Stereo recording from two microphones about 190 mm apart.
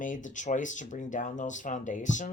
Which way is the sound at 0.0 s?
40° left (ahead or behind).